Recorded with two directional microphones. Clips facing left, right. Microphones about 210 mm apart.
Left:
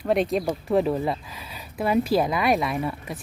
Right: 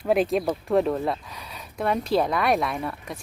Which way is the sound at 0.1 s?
Centre (ahead or behind).